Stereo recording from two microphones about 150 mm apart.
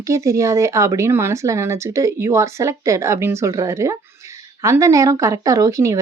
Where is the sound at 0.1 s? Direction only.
20° right (ahead or behind).